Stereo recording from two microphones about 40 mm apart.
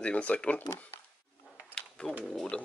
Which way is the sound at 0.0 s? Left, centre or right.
Left.